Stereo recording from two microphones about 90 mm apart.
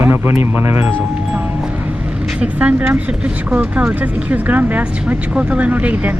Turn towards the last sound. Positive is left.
turn(degrees=-15)  # may be behind; listen again after turning